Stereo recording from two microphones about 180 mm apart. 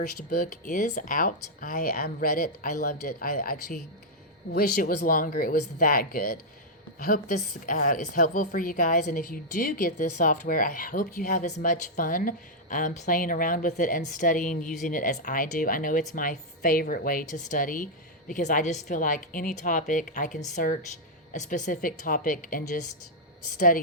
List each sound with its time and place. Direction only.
0.3 s a woman's voice: 50° left (ahead or behind)